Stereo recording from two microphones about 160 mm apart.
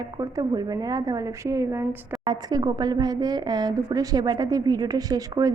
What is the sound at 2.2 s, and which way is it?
A woman's voice, 25° right (ahead or behind).